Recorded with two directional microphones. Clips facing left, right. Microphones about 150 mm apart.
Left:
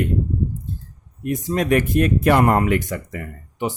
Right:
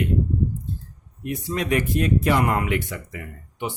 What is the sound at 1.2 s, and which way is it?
Speech, 45° left (ahead or behind).